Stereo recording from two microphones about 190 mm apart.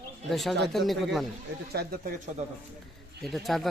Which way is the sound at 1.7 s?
55° right (ahead or behind).